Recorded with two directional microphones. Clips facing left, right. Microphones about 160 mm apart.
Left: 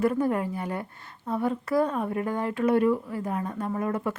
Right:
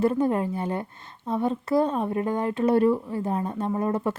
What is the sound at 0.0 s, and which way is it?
A woman's voice, 25° right (ahead or behind).